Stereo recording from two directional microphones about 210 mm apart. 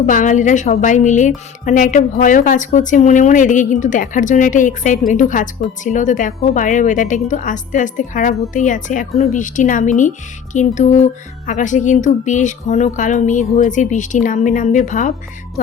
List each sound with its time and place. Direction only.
0.0 s speech: 40° left (ahead or behind)